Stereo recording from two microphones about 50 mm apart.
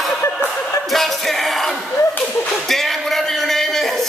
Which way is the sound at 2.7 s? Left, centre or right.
Centre.